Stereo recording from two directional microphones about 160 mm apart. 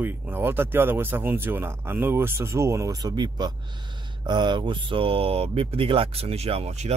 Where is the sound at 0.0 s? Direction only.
15° right (ahead or behind).